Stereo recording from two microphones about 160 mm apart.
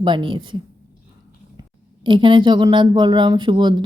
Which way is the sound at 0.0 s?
30° right (ahead or behind).